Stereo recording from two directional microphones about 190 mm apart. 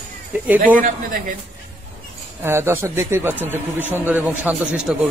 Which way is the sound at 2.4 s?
10° right (ahead or behind).